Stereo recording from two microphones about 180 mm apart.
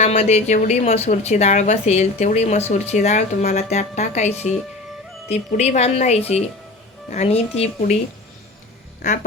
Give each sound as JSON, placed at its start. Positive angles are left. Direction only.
{"t": 0.0, "sound": "a woman's voice", "side_deg": 35}
{"t": 5.3, "sound": "a woman's voice", "side_deg": 40}